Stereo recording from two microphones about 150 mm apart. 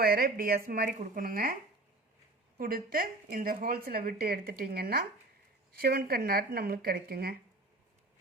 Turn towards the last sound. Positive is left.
turn(degrees=-90)